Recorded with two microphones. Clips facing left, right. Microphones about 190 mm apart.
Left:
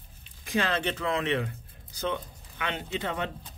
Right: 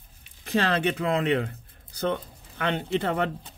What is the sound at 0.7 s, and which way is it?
Speech, 60° right (ahead or behind).